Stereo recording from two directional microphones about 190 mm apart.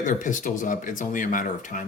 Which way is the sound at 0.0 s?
45° left (ahead or behind).